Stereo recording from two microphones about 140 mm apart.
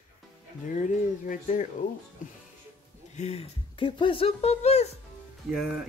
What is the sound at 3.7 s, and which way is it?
Speech, 35° left (ahead or behind).